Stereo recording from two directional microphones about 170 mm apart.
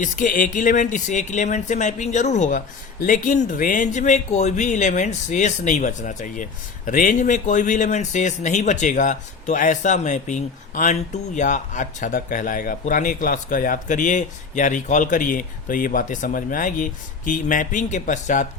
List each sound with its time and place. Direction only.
0.0 s speech: 50° left (ahead or behind)